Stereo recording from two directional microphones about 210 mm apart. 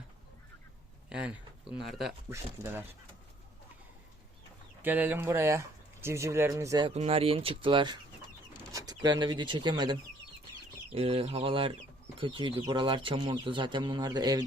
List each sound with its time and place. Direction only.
1.1 s speech: 5° right (ahead or behind)
2.3 s speech: 10° right (ahead or behind)
4.8 s speech: 10° right (ahead or behind)
6.9 s speech: 30° right (ahead or behind)